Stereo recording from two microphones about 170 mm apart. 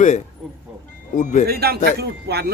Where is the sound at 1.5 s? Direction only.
65° right (ahead or behind).